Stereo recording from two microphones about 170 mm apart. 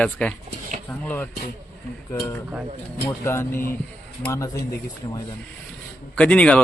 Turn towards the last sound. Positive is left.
turn(degrees=5)  # may be behind; listen again after turning